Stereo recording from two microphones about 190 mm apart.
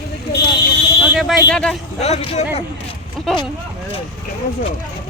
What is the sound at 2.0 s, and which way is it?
Speech, 35° left (ahead or behind).